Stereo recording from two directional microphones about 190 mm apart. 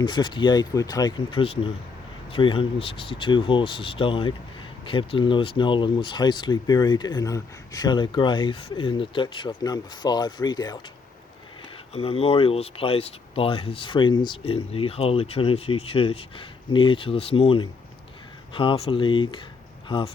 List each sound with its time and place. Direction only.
0.0 s speech: 25° left (ahead or behind)
11.9 s speech: 30° left (ahead or behind)